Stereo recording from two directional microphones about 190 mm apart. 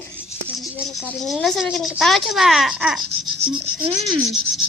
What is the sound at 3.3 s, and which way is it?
Speech, 25° right (ahead or behind).